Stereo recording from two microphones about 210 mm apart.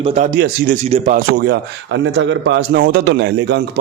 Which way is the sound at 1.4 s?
55° right (ahead or behind).